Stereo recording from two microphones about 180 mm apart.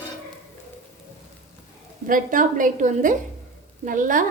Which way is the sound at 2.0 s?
50° right (ahead or behind).